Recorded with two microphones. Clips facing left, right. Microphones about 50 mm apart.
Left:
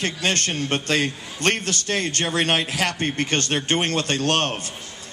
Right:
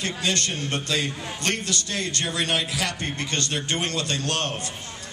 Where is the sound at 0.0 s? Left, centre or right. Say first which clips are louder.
Left 3 dB; left.